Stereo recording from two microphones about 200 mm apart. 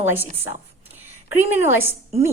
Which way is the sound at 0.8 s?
10° right (ahead or behind).